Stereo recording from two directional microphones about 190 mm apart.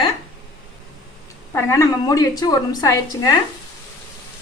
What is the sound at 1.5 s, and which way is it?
A woman's voice, 15° left (ahead or behind).